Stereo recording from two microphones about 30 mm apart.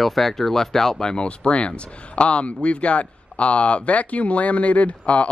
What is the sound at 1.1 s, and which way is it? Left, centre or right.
Speech, left.